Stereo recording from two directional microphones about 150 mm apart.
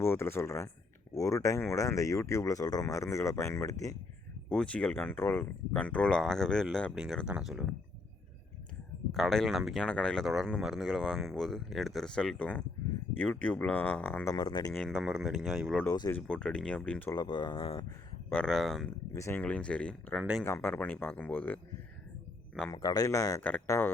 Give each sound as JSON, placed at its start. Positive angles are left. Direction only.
{"t": 0.0, "sound": "speech", "side_deg": 15}
{"t": 4.4, "sound": "speech", "side_deg": 5}
{"t": 9.1, "sound": "speech", "side_deg": 0}
{"t": 14.3, "sound": "speech", "side_deg": 30}
{"t": 14.7, "sound": "speech", "side_deg": 5}
{"t": 15.9, "sound": "speech", "side_deg": 20}
{"t": 16.2, "sound": "speech", "side_deg": 5}
{"t": 17.1, "sound": "speech", "side_deg": 30}
{"t": 18.3, "sound": "speech", "side_deg": 5}
{"t": 19.1, "sound": "speech", "side_deg": 15}
{"t": 22.7, "sound": "speech", "side_deg": 25}
{"t": 23.4, "sound": "speech", "side_deg": 10}